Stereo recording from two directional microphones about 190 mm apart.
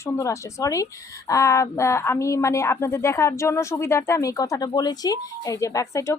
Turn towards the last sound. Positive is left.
turn(degrees=15)  # may be behind; listen again after turning